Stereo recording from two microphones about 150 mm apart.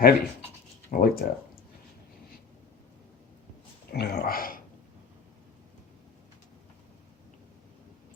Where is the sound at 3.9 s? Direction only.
90° left; by 4.6 s 70° left (ahead or behind).